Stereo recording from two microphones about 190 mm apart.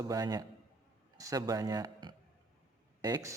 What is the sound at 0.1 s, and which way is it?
A man's voice, 20° right (ahead or behind).